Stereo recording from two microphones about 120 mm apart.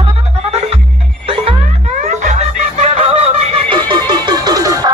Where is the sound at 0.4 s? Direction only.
60° right (ahead or behind).